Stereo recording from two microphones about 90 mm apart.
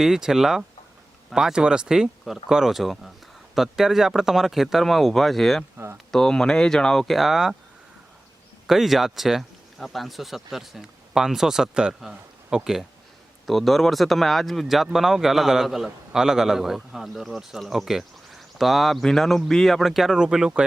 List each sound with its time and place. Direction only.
0.0 s speech: 5° right (ahead or behind)
5.7 s speech: 25° right (ahead or behind)
6.1 s speech: 5° left (ahead or behind)
8.6 s speech: centre (ahead or behind)